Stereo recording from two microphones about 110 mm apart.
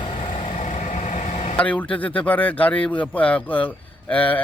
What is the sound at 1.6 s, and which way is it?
A man's voice, 10° left (ahead or behind).